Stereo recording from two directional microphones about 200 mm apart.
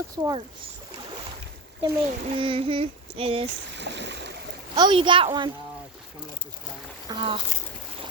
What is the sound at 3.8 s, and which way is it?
Boat, 60° right (ahead or behind).